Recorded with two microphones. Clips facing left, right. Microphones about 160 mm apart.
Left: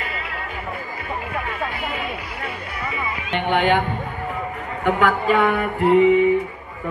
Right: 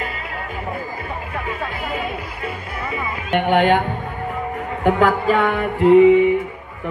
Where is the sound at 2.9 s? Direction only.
50° right (ahead or behind).